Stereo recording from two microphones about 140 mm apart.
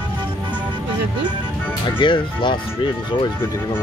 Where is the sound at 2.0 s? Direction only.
35° left (ahead or behind).